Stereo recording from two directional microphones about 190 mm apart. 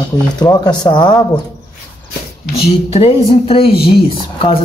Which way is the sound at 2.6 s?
30° left (ahead or behind).